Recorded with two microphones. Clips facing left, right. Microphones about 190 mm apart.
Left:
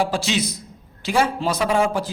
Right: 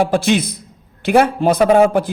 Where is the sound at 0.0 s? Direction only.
55° right (ahead or behind).